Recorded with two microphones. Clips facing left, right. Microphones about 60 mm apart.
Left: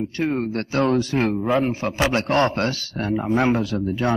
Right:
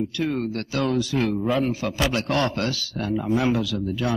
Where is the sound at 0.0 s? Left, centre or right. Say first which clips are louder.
Left 2 dB; left.